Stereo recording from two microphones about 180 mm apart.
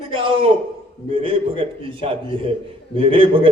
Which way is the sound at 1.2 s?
30° right (ahead or behind).